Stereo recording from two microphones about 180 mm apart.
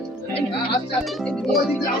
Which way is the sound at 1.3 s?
Centre (ahead or behind).